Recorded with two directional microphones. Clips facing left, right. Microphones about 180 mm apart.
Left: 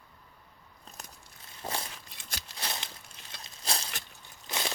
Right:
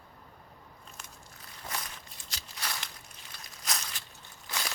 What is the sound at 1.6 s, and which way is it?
Walk, 30° left (ahead or behind).